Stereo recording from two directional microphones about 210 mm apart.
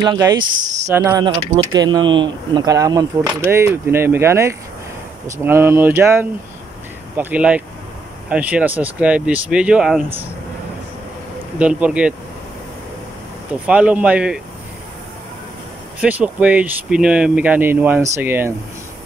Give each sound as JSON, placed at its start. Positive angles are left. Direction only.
{"t": 0.0, "sound": "speech", "side_deg": -20}
{"t": 11.5, "sound": "speech", "side_deg": -5}
{"t": 13.7, "sound": "speech", "side_deg": -5}
{"t": 16.0, "sound": "speech", "side_deg": -5}